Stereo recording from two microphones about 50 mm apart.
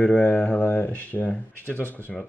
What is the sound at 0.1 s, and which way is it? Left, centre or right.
Speech, left.